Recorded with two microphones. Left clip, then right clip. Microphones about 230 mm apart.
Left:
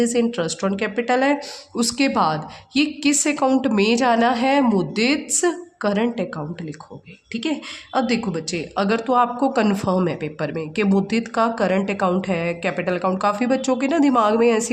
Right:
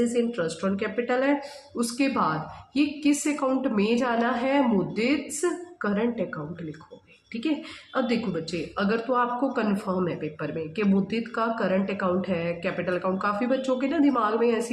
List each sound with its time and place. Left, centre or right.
0.1 s speech: left
7.9 s speech: left